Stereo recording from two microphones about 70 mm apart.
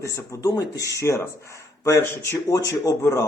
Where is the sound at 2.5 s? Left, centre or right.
Left.